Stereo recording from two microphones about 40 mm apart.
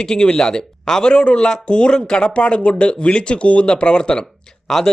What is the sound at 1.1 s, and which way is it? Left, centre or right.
Speech, left.